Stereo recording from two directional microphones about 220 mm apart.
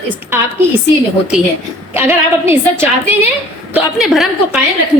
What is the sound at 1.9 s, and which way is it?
A woman's voice, 10° right (ahead or behind).